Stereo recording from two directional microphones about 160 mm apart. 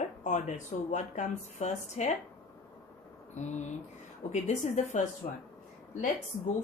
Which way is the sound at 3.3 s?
45° left (ahead or behind).